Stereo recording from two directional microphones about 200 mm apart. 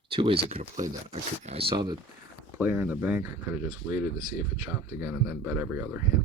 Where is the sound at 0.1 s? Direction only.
25° right (ahead or behind).